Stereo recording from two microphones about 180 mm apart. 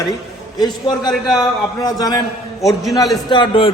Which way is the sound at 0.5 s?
20° left (ahead or behind).